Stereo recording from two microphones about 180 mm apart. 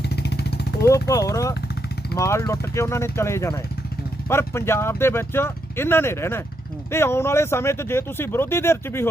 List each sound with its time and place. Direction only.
0.2 s vehicle: 70° left (ahead or behind)
0.9 s speech: 15° left (ahead or behind)